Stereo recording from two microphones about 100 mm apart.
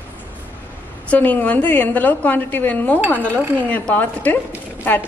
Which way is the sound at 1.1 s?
15° left (ahead or behind).